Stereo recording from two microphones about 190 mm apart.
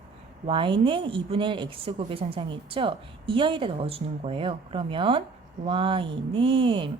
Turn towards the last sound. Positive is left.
turn(degrees=-25)  # may be behind; listen again after turning